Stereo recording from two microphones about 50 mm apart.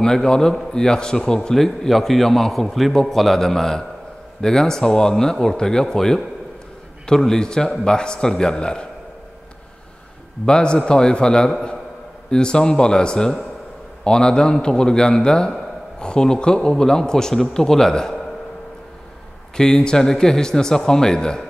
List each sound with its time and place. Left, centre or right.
0.0 s a man's voice: centre
10.4 s a man's voice: centre
19.5 s a man's voice: centre